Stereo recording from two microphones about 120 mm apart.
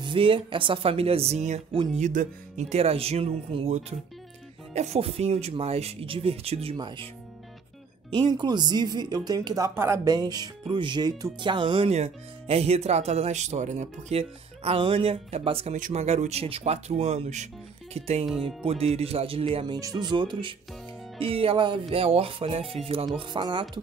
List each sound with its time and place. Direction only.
0.0 s speech: 45° right (ahead or behind); by 1.6 s 70° right (ahead or behind)
2.0 s speech: 85° right; by 7.1 s 50° right (ahead or behind)
8.1 s speech: 40° right (ahead or behind)
9.8 s speech: 25° right (ahead or behind)
11.3 s speech: 40° right (ahead or behind)
11.9 s speech: 60° right (ahead or behind); by 14.1 s 80° right
14.1 s speech: 50° right (ahead or behind)
15.7 s speech: 75° right (ahead or behind)
17.9 s speech: 60° right (ahead or behind)
23.1 s speech: 40° right (ahead or behind)